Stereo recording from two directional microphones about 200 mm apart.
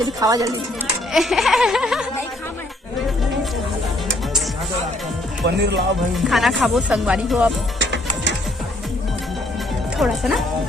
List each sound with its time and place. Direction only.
0.2 s speech: 15° right (ahead or behind)
1.1 s music: centre (ahead or behind)
5.5 s speech: 55° right (ahead or behind)
6.1 s music: centre (ahead or behind)
10.0 s music: centre (ahead or behind)